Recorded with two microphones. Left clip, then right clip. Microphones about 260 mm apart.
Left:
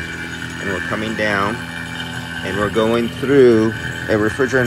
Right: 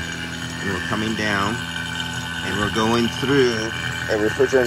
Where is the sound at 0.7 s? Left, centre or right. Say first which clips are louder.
Left 2 dB; centre.